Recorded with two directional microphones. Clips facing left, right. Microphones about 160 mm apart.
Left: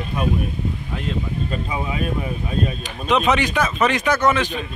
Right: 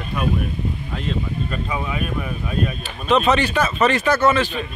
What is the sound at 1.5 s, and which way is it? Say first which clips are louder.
Speech: even; 25° left (ahead or behind).